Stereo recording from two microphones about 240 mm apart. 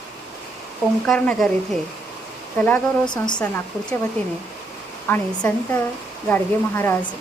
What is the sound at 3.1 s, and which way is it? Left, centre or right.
Speech, centre.